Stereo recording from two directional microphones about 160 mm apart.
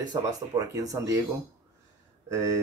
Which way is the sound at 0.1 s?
20° right (ahead or behind).